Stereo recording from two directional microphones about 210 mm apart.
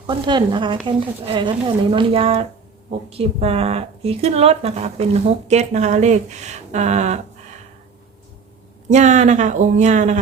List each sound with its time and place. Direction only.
0.1 s speech: 20° right (ahead or behind)
8.9 s speech: 35° right (ahead or behind)